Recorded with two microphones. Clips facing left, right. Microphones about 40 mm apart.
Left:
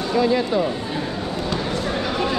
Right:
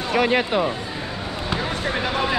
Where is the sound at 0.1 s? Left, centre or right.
Right.